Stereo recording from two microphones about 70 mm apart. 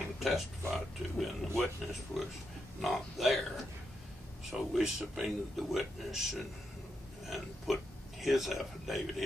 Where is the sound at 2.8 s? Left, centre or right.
Centre.